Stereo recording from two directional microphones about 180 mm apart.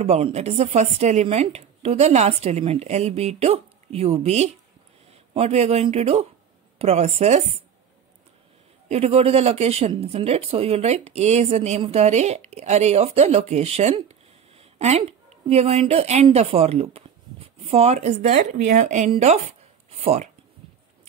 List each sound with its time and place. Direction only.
0.0 s speech: 35° right (ahead or behind)
8.8 s speech: 35° right (ahead or behind)